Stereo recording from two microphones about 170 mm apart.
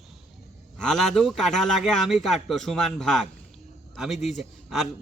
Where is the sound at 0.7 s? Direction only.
Centre (ahead or behind).